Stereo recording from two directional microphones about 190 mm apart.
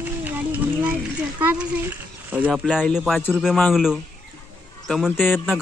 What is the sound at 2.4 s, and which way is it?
Speech, 5° right (ahead or behind).